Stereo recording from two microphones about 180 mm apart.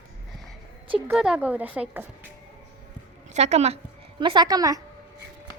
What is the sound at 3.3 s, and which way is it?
Speech, 40° right (ahead or behind).